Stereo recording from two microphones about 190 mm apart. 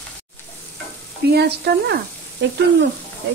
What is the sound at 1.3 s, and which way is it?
Speech, 60° right (ahead or behind).